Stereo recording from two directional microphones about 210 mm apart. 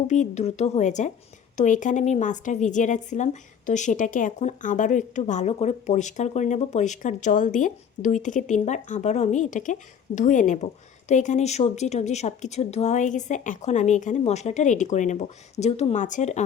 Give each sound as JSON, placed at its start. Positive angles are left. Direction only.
{"t": 0.1, "sound": "a woman's voice", "side_deg": 35}